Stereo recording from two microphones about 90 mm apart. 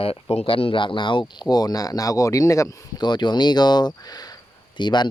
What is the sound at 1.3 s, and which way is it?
Speech, 50° left (ahead or behind).